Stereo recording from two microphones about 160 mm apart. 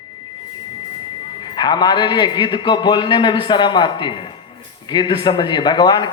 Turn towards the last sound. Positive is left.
turn(degrees=25)  # may be behind; listen again after turning